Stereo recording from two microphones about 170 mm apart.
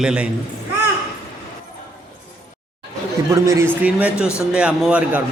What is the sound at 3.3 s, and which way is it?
A man's voice, 15° right (ahead or behind).